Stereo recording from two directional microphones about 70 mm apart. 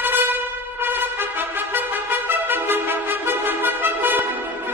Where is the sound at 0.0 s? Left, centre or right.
Right.